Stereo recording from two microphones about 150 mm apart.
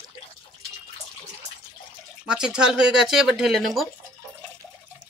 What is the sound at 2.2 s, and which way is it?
Speech, 5° right (ahead or behind).